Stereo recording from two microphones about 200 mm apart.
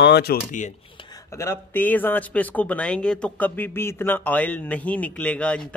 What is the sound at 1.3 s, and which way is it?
Speech, 15° left (ahead or behind).